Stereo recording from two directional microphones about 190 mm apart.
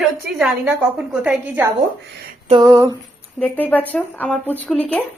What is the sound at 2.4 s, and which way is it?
Female singing, 25° right (ahead or behind).